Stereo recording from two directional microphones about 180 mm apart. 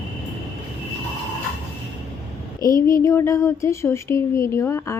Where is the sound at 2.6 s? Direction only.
20° left (ahead or behind).